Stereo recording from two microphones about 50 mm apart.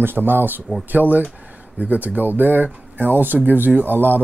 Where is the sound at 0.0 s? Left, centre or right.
Right.